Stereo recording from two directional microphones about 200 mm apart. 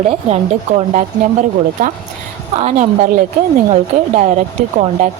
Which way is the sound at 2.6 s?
35° right (ahead or behind).